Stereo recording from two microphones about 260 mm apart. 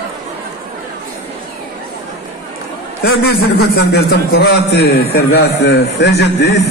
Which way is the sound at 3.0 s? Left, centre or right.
Left.